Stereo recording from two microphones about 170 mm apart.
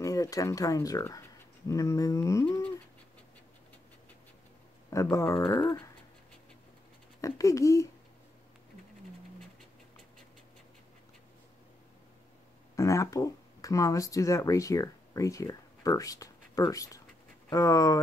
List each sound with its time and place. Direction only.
0.0 s speech: 20° left (ahead or behind)
1.7 s a sound: 20° left (ahead or behind)
4.9 s speech: 20° left (ahead or behind)
7.2 s speech: 20° left (ahead or behind)
12.7 s speech: 20° left (ahead or behind)